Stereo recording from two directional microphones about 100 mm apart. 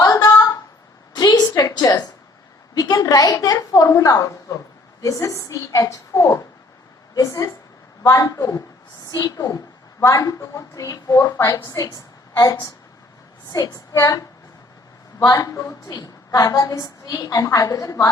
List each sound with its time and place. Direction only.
0.0 s a sound: 35° left (ahead or behind)
2.7 s a woman's voice: 40° left (ahead or behind)
15.9 s a woman's voice: 40° left (ahead or behind)